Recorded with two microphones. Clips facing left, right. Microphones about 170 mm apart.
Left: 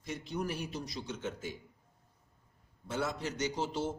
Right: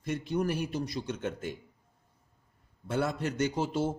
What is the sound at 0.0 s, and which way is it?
A man's voice, 55° right (ahead or behind).